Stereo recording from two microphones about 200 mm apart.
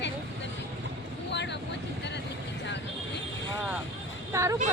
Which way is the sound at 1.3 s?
60° left (ahead or behind).